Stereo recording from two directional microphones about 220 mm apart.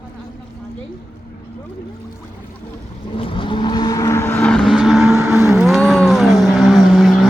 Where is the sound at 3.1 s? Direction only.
25° left (ahead or behind); by 5.1 s centre (ahead or behind).